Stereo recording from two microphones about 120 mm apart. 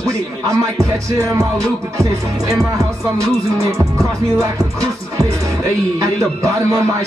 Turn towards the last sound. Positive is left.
turn(degrees=-25)  # may be behind; listen again after turning